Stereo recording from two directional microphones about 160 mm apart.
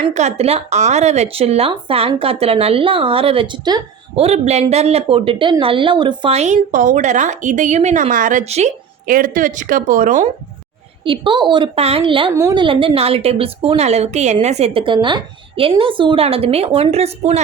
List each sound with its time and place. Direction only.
0.1 s a woman's voice: 45° right (ahead or behind); by 3.8 s 25° right (ahead or behind)
4.1 s a woman's voice: 40° right (ahead or behind)
6.3 s a woman's voice: 45° right (ahead or behind)
9.0 s a woman's voice: 60° right (ahead or behind)
11.0 s a woman's voice: 30° right (ahead or behind)
12.3 s a woman's voice: 20° right (ahead or behind); by 17.4 s 40° right (ahead or behind)